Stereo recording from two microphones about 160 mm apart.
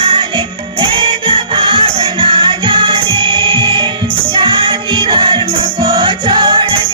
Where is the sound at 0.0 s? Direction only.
35° right (ahead or behind).